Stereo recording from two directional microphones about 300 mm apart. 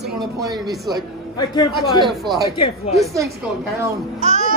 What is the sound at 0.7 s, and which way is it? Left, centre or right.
Speech, centre.